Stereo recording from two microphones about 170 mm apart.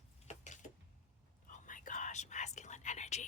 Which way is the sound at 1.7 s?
50° left (ahead or behind).